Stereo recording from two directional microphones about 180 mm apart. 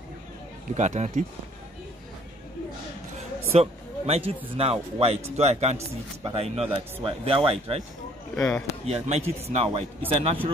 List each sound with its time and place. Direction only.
0.7 s speech: 40° right (ahead or behind)
3.5 s speech: 35° right (ahead or behind)
8.4 s speech: 5° left (ahead or behind)
8.8 s speech: 35° right (ahead or behind)